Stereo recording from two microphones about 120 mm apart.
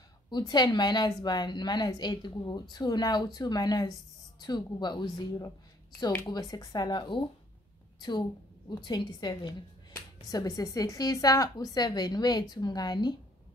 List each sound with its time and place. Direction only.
0.3 s a woman's voice: 35° left (ahead or behind)